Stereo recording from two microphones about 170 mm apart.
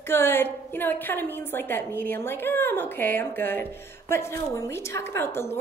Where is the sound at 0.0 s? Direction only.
15° left (ahead or behind).